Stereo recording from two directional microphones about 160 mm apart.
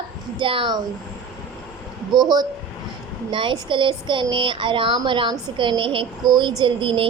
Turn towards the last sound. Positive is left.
turn(degrees=-35)  # may be behind; listen again after turning